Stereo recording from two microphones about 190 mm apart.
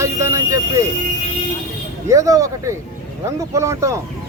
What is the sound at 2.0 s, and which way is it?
Speech, 15° right (ahead or behind).